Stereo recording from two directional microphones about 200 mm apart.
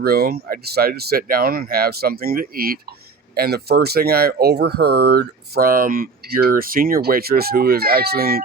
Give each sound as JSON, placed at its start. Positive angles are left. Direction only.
{"t": 0.0, "sound": "speech", "side_deg": -50}